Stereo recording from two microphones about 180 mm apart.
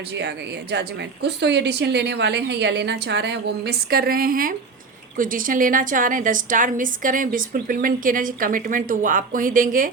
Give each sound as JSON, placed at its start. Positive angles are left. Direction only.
{"t": 0.2, "sound": "a woman's voice", "side_deg": -70}